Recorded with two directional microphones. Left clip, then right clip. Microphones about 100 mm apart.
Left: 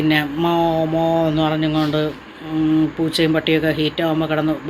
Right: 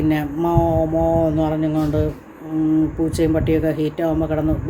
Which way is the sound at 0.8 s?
55° left (ahead or behind).